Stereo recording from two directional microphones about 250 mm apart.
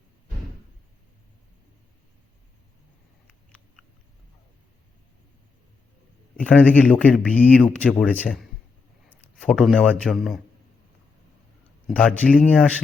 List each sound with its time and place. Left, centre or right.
6.3 s a man's voice: centre
11.9 s speech: centre